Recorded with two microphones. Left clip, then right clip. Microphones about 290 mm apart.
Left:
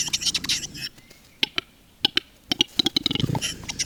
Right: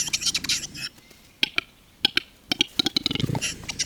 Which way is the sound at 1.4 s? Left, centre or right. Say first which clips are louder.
Right 1 dB; left.